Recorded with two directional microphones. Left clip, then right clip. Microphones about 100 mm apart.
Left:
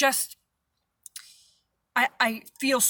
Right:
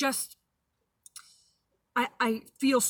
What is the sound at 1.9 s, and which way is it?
Speech, 25° left (ahead or behind).